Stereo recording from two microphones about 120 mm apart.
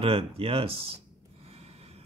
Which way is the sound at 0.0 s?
55° right (ahead or behind).